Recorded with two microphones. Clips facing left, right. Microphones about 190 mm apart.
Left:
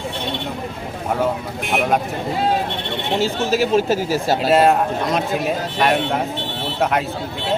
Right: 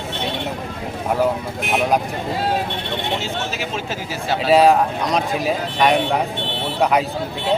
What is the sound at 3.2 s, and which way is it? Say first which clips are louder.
Speech: left 7 dB; 40° left (ahead or behind).